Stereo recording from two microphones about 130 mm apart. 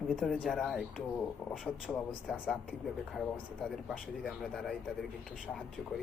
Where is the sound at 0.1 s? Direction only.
5° left (ahead or behind).